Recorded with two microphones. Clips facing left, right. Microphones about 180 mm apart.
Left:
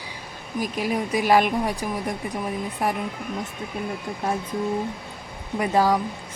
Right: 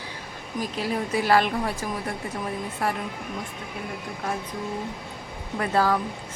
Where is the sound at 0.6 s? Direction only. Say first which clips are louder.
Left 2 dB; 15° left (ahead or behind).